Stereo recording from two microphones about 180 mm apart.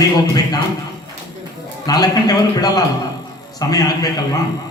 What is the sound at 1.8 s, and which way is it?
A man's voice, 20° left (ahead or behind).